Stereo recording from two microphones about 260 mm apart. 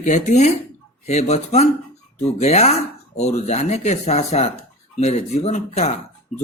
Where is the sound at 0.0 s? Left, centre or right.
Left.